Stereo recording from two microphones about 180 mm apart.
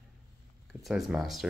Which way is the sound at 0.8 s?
Centre (ahead or behind).